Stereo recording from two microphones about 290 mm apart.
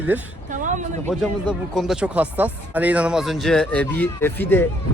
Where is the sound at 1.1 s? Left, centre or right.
Centre.